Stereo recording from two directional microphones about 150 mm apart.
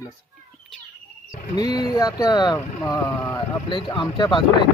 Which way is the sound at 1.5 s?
25° left (ahead or behind).